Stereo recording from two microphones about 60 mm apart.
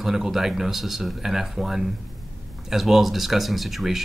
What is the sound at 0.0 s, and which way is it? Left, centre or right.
Speech, centre.